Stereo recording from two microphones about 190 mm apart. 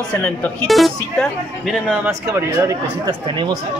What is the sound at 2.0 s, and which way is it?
Speech, 15° right (ahead or behind).